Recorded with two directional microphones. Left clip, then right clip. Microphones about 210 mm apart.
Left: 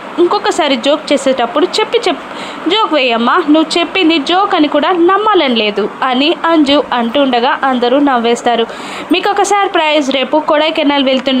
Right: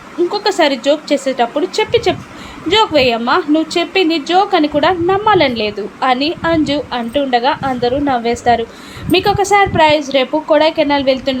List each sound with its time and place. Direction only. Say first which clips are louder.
0.3 s a woman's voice: even; 15° left (ahead or behind)